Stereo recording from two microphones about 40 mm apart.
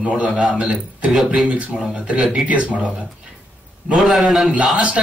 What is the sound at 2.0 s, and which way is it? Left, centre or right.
Speech, right.